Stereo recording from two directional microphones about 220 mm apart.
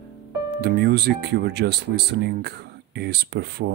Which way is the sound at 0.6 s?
45° right (ahead or behind).